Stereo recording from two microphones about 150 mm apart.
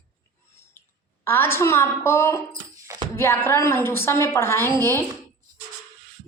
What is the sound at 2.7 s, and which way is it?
Hands, 20° right (ahead or behind).